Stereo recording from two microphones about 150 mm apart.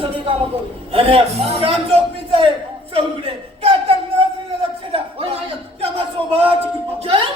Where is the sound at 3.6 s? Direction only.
40° right (ahead or behind).